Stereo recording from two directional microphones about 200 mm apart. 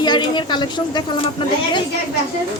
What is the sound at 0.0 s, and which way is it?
A woman's voice, 20° left (ahead or behind).